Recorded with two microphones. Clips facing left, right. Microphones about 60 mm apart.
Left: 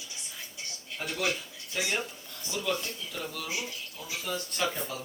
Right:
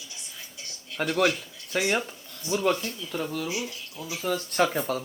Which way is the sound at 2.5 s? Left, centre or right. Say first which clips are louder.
Right 7 dB; right.